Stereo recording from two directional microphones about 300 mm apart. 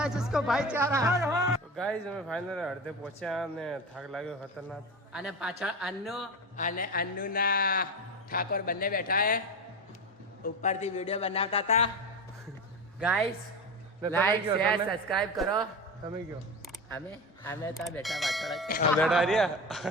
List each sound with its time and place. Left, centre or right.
0.0 s speech: centre
6.6 s a man's voice: left
10.4 s a man's voice: left
13.0 s speech: centre
17.1 s speech: centre